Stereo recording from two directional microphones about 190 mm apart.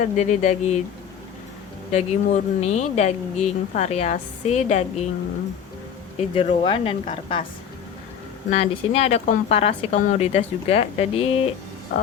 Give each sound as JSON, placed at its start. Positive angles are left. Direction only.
{"t": 0.2, "sound": "speech", "side_deg": 40}
{"t": 1.9, "sound": "speech", "side_deg": 35}
{"t": 6.1, "sound": "a woman's voice", "side_deg": 30}
{"t": 8.4, "sound": "speech", "side_deg": 30}